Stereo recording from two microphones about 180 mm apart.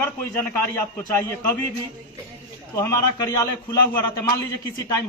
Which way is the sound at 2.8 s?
15° left (ahead or behind).